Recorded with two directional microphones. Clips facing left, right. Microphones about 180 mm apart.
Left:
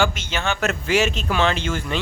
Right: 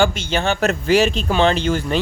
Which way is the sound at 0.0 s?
30° right (ahead or behind).